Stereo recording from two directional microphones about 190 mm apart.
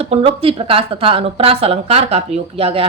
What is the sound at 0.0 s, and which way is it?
Speech, 30° right (ahead or behind).